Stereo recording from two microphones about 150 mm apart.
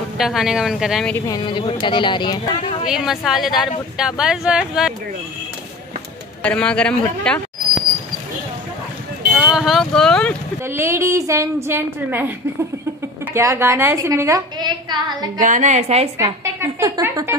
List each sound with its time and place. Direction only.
0.2 s speech: centre (ahead or behind)
1.1 s speech: 25° left (ahead or behind)
2.9 s speech: 5° right (ahead or behind)
6.4 s a man's voice: 10° left (ahead or behind)
9.4 s speech: 5° right (ahead or behind)
10.6 s a woman's voice: 15° right (ahead or behind)
14.6 s a woman's voice: 30° right (ahead or behind)
15.3 s a woman's voice: 60° right (ahead or behind)
16.4 s a woman's voice: 20° right (ahead or behind)